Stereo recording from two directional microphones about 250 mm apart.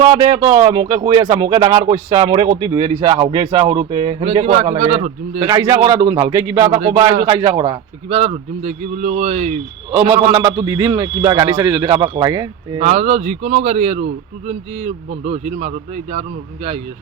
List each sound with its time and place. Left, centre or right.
0.0 s speech: centre
5.4 s a man's voice: centre
6.8 s speech: right
7.3 s speech: centre
10.3 s a man's voice: centre